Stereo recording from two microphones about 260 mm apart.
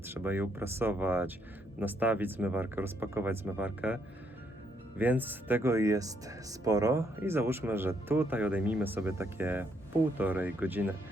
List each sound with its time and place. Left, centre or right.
0.0 s speech: centre